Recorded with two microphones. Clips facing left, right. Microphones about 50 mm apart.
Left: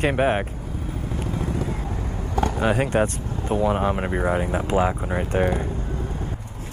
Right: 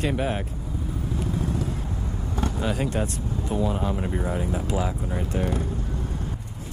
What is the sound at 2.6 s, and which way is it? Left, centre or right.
Speech, left.